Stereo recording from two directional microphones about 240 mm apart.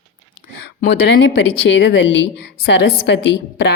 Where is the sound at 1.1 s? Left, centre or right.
Left.